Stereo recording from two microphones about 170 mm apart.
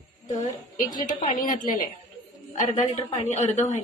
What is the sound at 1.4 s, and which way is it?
Speech, 55° left (ahead or behind).